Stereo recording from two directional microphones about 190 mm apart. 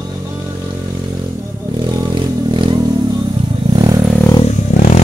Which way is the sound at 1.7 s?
25° right (ahead or behind).